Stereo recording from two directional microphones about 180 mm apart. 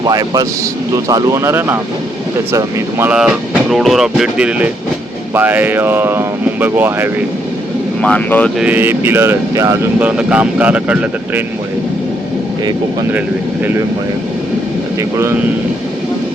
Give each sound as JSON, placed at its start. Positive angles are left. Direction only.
{"t": 0.0, "sound": "speech", "side_deg": -20}
{"t": 8.0, "sound": "speech", "side_deg": 5}
{"t": 8.6, "sound": "speech", "side_deg": -10}